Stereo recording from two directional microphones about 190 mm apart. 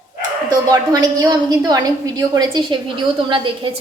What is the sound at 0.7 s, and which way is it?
A woman's voice, 20° right (ahead or behind).